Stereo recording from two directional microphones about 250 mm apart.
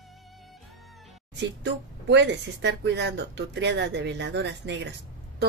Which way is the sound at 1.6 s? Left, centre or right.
Right.